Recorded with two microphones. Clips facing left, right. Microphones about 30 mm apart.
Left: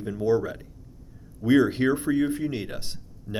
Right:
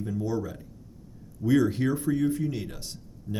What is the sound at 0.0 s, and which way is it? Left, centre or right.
A man's voice, left.